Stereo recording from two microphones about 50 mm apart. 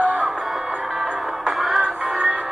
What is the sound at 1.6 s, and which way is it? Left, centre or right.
Music, centre.